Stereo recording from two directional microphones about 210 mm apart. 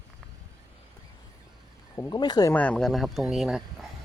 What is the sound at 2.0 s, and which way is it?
Speech, 20° left (ahead or behind).